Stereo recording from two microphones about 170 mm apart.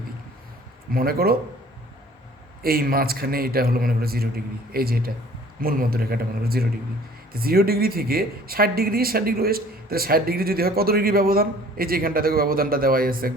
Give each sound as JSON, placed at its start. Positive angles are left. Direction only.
{"t": 0.9, "sound": "speech", "side_deg": -60}
{"t": 2.6, "sound": "speech", "side_deg": -60}